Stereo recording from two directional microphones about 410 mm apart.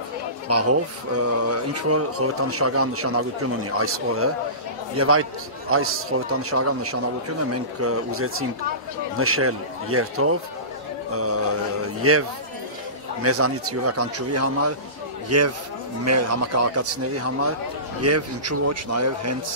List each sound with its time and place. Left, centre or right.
0.5 s speech: right